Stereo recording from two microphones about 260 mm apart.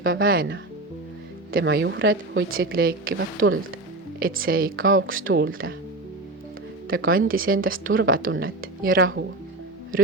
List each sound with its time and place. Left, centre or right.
0.0 s a woman's voice: right
6.9 s a woman's voice: right
8.3 s a woman's voice: right
8.8 s speech: right